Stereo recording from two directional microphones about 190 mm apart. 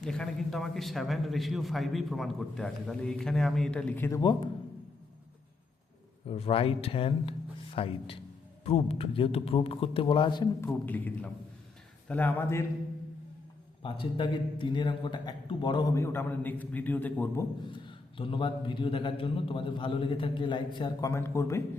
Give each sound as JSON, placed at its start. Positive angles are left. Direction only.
{"t": 0.0, "sound": "a man's voice", "side_deg": 5}
{"t": 6.2, "sound": "a man's voice", "side_deg": 30}
{"t": 10.7, "sound": "a man's voice", "side_deg": 10}
{"t": 13.8, "sound": "a man's voice", "side_deg": 25}
{"t": 17.7, "sound": "a man's voice", "side_deg": 25}